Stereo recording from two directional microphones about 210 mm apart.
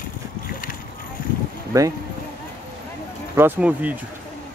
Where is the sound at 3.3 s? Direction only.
10° right (ahead or behind).